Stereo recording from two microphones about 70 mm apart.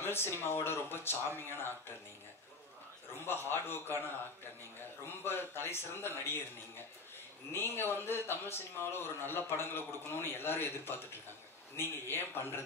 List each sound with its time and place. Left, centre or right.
0.0 s a man's voice: left
3.3 s a man's voice: left
5.2 s a man's voice: left
7.5 s a man's voice: left